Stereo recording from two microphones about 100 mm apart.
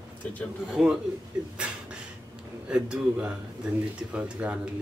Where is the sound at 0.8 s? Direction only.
Centre (ahead or behind).